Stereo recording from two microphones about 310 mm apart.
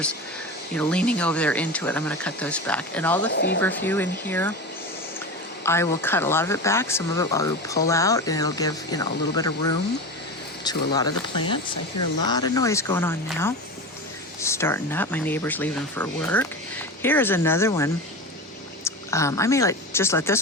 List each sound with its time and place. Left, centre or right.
0.7 s speech: centre
3.3 s speech: left
3.6 s speech: centre
5.6 s speech: centre
10.6 s speech: centre